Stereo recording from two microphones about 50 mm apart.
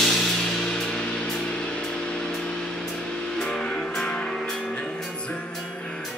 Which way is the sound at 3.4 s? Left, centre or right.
Centre.